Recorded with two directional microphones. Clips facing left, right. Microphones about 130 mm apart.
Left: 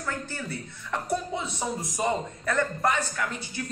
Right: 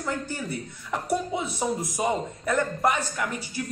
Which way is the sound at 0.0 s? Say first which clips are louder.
Right 3 dB; 15° right (ahead or behind).